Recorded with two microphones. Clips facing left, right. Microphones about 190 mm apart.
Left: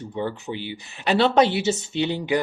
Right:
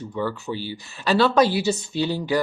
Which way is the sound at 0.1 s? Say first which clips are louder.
Right 1 dB; 25° left (ahead or behind).